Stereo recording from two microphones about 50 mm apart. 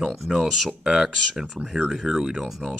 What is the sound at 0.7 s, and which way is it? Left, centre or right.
Speech, centre.